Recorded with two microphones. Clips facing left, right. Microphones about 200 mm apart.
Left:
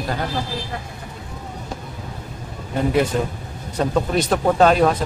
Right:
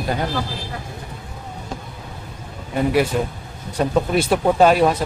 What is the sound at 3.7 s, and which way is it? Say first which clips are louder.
Speech: right 1 dB; 10° right (ahead or behind).